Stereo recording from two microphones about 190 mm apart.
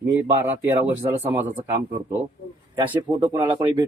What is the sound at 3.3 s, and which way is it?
Speech, 20° right (ahead or behind).